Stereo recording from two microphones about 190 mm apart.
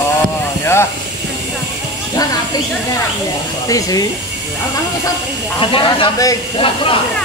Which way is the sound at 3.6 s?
20° left (ahead or behind).